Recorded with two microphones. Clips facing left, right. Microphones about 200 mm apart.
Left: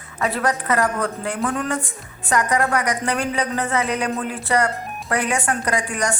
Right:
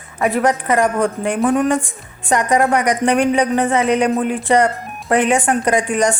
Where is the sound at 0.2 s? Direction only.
15° right (ahead or behind).